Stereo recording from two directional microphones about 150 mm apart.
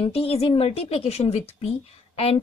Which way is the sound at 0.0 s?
40° left (ahead or behind).